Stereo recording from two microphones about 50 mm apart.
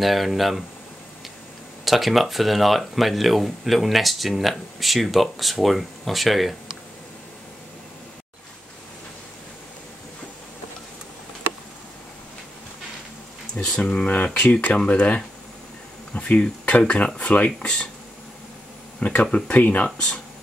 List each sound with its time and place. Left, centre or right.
0.0 s speech: centre
1.9 s speech: centre
13.6 s speech: centre
18.9 s speech: left